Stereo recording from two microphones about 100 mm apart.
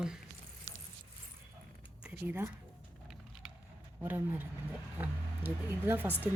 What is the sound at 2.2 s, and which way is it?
Speech, 20° right (ahead or behind).